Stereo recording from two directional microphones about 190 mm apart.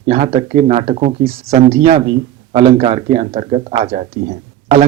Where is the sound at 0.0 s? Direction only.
35° right (ahead or behind).